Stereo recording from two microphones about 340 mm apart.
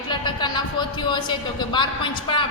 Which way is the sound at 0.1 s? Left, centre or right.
Centre.